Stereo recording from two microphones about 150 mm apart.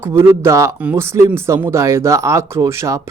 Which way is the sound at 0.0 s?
15° right (ahead or behind).